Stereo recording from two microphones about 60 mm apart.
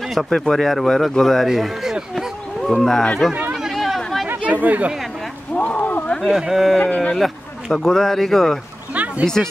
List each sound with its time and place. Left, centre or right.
0.1 s a man's voice: centre
3.5 s chatter: centre
4.4 s speech: right
5.6 s a sound: left
6.2 s speech: centre
8.9 s a sound: right
9.2 s speech: centre